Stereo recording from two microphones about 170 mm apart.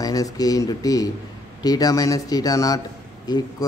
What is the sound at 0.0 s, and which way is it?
Speech, 20° left (ahead or behind).